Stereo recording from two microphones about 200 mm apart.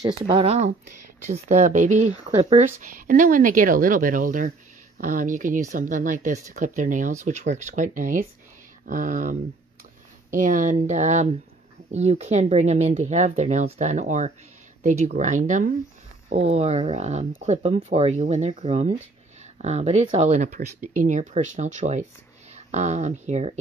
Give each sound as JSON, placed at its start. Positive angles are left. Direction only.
{"t": 0.0, "sound": "speech", "side_deg": -25}